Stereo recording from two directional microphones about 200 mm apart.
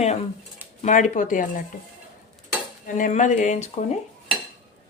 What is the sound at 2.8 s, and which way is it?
Speech, 40° left (ahead or behind).